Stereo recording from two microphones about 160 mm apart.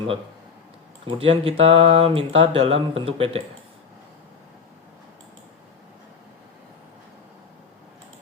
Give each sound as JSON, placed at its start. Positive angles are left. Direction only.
{"t": 1.0, "sound": "speech", "side_deg": -35}